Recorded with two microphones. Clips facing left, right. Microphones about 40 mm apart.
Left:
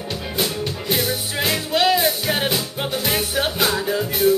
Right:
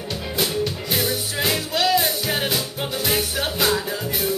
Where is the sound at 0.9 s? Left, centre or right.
Centre.